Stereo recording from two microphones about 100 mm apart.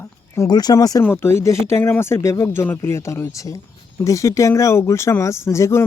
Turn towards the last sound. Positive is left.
turn(degrees=30)  # may be behind; listen again after turning